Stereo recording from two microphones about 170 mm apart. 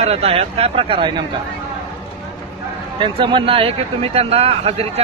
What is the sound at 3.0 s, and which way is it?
A man's voice, 30° right (ahead or behind).